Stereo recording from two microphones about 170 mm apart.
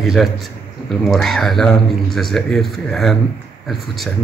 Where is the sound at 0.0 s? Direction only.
Centre (ahead or behind).